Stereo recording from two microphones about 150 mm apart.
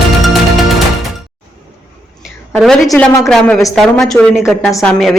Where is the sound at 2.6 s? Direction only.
Centre (ahead or behind).